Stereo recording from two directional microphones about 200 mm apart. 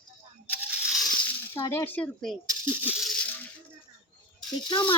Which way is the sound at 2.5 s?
10° right (ahead or behind).